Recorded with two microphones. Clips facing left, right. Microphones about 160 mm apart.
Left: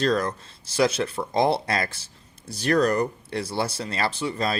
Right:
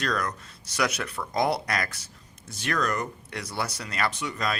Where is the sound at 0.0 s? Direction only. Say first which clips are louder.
Left 6 dB; 30° left (ahead or behind).